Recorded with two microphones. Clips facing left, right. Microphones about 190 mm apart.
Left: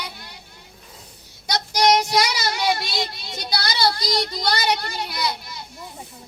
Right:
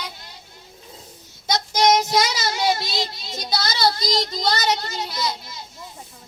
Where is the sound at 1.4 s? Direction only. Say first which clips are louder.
Right 1 dB; 25° right (ahead or behind).